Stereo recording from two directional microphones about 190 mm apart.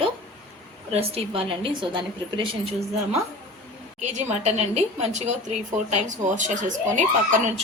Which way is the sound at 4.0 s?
35° right (ahead or behind).